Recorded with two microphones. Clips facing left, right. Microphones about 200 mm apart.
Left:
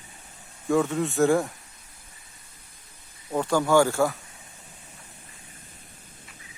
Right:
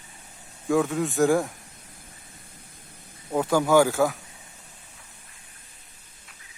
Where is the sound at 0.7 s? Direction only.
Centre (ahead or behind).